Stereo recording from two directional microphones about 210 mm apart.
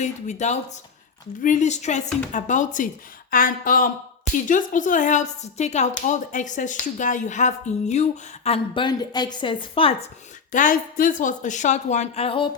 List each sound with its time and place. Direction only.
0.0 s speech: 35° left (ahead or behind)
10.5 s speech: 40° left (ahead or behind)